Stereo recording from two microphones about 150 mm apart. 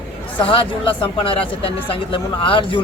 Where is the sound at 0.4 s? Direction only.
35° left (ahead or behind).